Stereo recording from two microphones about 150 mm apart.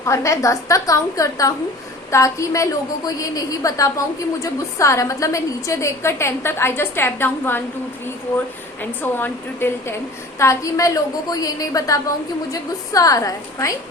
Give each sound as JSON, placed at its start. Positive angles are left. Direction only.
{"t": 0.0, "sound": "a woman's voice", "side_deg": 20}
{"t": 8.8, "sound": "a woman's voice", "side_deg": 15}